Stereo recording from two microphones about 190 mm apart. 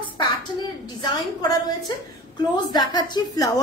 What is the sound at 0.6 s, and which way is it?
Speech, 25° left (ahead or behind).